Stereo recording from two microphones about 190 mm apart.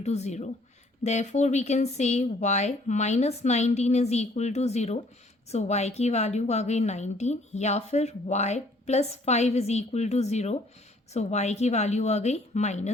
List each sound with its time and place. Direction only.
0.0 s a woman's voice: 35° left (ahead or behind)